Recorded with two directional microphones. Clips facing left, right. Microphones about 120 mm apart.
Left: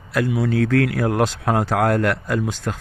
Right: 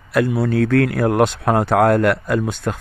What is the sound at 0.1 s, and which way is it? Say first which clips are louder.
A man's voice: right 3 dB; 55° right (ahead or behind).